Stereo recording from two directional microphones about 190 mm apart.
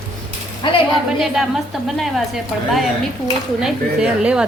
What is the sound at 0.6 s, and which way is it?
Speech, 25° left (ahead or behind).